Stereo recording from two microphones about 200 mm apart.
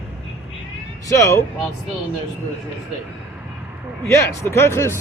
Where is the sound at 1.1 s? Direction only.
15° left (ahead or behind).